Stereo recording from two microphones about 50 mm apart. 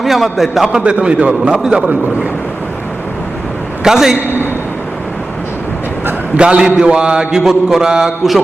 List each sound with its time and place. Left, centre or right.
0.0 s a man's voice: centre
0.8 s a man's voice: right
3.8 s speech: centre
6.3 s a man's voice: right